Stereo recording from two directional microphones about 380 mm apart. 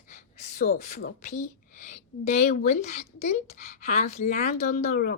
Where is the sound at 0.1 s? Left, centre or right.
Centre.